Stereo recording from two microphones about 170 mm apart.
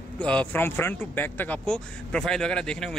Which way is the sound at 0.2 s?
10° left (ahead or behind).